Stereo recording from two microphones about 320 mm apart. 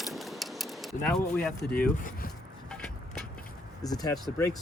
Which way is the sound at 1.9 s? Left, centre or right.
Left.